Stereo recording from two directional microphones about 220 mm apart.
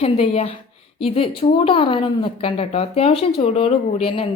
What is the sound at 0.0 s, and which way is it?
Speech, 25° left (ahead or behind).